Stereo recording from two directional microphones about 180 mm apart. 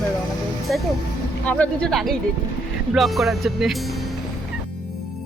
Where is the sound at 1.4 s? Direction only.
5° left (ahead or behind).